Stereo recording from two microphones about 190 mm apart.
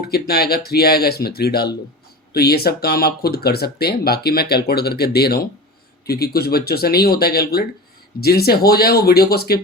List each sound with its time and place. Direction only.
0.1 s speech: 55° left (ahead or behind)